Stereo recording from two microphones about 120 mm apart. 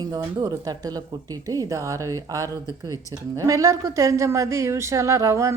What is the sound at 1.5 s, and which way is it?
Speech, 30° right (ahead or behind).